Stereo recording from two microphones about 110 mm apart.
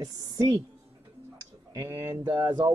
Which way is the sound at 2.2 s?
40° right (ahead or behind).